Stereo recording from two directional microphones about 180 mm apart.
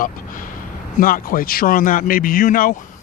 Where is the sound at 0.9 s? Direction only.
50° left (ahead or behind).